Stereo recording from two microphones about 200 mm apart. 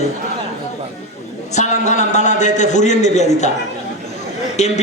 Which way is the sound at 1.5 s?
35° left (ahead or behind).